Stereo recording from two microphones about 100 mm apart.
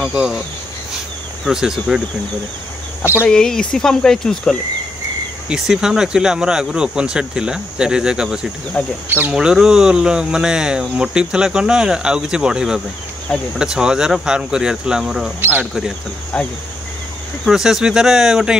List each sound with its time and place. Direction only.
0.1 s speech: 10° right (ahead or behind)
1.4 s speech: 5° right (ahead or behind)
3.3 s speech: 5° left (ahead or behind)
5.5 s speech: 5° right (ahead or behind)
8.8 s speech: 15° left (ahead or behind)
9.3 s speech: 10° right (ahead or behind)
16.3 s speech: 10° left (ahead or behind)
17.5 s speech: 5° right (ahead or behind)